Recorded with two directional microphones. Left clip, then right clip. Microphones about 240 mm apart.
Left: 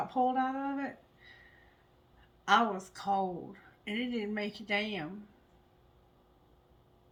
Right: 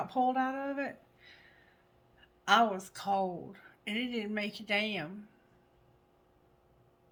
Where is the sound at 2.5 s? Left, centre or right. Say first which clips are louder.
Right 1 dB; right.